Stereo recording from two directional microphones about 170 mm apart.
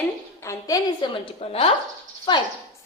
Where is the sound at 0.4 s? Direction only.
25° left (ahead or behind).